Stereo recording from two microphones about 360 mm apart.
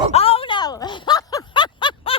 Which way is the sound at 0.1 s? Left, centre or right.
Centre.